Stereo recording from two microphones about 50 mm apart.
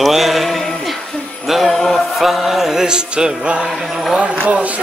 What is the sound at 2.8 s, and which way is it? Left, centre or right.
Music, centre.